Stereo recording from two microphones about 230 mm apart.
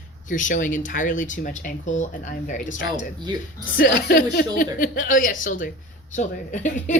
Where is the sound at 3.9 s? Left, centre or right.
Left.